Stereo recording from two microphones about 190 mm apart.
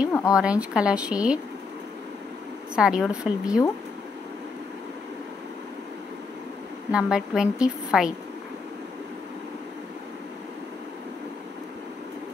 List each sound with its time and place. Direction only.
0.3 s a woman's voice: 5° right (ahead or behind)
2.7 s a woman's voice: 5° right (ahead or behind)
6.9 s a woman's voice: 5° right (ahead or behind)